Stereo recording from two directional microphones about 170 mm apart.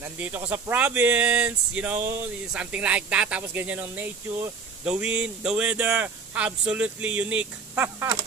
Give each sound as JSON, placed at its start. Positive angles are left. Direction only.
{"t": 0.0, "sound": "speech", "side_deg": -10}